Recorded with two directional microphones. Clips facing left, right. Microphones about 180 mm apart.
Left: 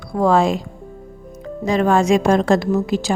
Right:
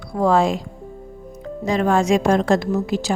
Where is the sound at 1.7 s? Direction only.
90° left.